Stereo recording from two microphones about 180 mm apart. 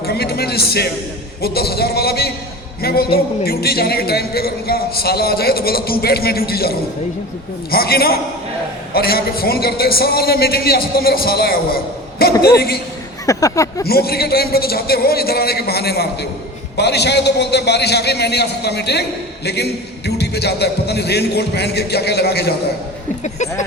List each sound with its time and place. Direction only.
0.0 s a man's voice: 60° left (ahead or behind)
13.2 s speech: 20° left (ahead or behind)
13.8 s a man's voice: 60° left (ahead or behind)
23.2 s speech: 40° left (ahead or behind)